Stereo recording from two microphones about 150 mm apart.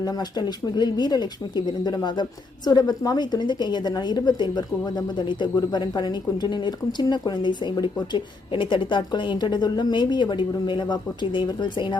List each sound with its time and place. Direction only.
0.0 s a woman's voice: 25° left (ahead or behind)